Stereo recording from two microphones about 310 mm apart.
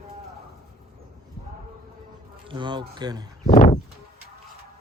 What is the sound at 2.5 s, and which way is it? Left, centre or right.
Speech, centre.